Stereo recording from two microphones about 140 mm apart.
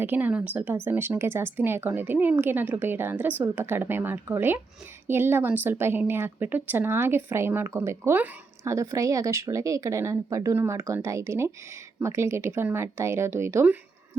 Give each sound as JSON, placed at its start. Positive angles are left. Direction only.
{"t": 0.0, "sound": "a woman's voice", "side_deg": -15}